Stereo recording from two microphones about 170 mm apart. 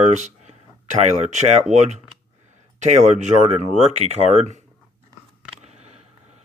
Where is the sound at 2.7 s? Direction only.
45° right (ahead or behind).